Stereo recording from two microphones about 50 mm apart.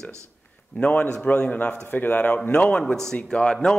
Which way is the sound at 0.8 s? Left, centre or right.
Left.